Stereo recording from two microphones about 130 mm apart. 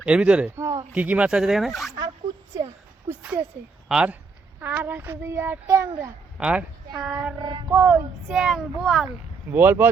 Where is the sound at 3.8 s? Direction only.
5° right (ahead or behind); by 6.1 s 20° right (ahead or behind).